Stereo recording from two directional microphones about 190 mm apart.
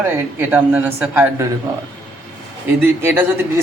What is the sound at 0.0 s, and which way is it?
A man's voice, 10° right (ahead or behind).